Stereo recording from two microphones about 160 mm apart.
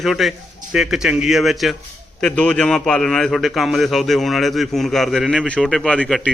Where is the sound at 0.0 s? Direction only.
Centre (ahead or behind).